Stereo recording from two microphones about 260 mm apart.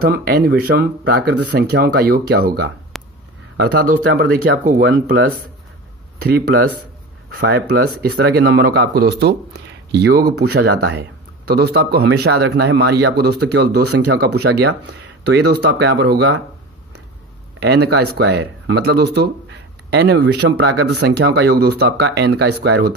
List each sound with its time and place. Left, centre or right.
0.0 s speech: right
2.9 s a sound: centre
3.5 s speech: right
6.3 s speech: right
17.6 s speech: right